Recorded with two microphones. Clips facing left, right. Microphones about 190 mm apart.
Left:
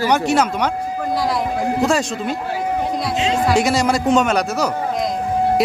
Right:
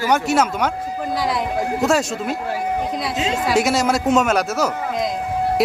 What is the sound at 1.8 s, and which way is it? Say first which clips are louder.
Speech: even; centre (ahead or behind).